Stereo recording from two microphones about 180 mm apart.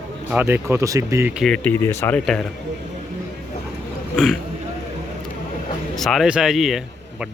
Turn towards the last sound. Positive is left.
turn(degrees=0)  # may be behind; listen again after turning